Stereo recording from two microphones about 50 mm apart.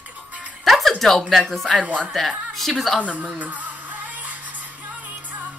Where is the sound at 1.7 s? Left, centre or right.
Right.